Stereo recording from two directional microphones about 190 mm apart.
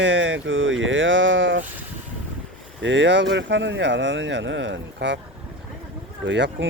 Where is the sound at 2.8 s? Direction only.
70° right (ahead or behind).